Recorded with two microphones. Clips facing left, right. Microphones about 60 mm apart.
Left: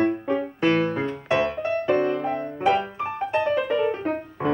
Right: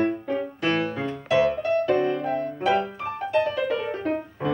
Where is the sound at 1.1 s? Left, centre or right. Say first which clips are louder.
Right 2 dB; left.